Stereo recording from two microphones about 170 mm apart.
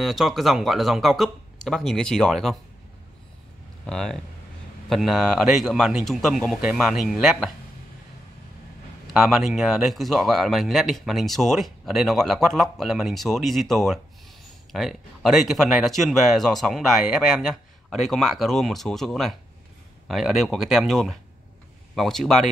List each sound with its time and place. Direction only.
0.0 s speech: centre (ahead or behind)
3.8 s speech: 5° left (ahead or behind)
9.1 s speech: centre (ahead or behind)